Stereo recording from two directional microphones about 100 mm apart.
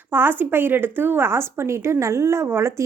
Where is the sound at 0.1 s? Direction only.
20° right (ahead or behind).